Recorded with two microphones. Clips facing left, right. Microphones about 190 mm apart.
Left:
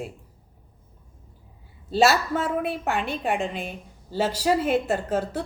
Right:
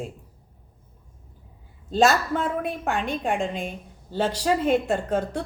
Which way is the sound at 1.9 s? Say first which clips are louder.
Even; 5° left (ahead or behind).